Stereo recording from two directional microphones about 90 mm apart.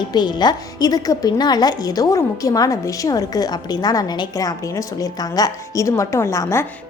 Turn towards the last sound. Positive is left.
turn(degrees=30)  # may be behind; listen again after turning